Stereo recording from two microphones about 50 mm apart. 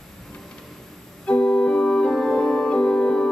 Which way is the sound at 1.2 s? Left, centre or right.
Centre.